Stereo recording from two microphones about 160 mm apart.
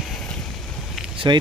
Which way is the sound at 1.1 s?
30° right (ahead or behind).